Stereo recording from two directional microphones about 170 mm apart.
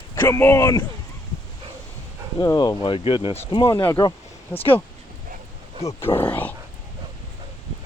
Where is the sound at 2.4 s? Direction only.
25° left (ahead or behind).